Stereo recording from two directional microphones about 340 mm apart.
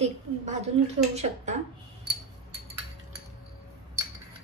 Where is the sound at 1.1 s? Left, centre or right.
Centre.